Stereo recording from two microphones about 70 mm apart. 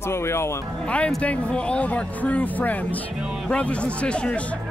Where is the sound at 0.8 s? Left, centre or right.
Centre.